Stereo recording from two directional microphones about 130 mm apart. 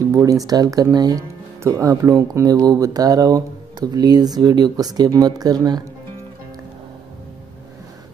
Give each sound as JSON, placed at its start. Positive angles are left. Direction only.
{"t": 0.1, "sound": "speech", "side_deg": -25}